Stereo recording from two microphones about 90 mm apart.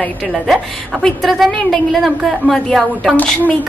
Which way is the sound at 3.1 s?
20° left (ahead or behind).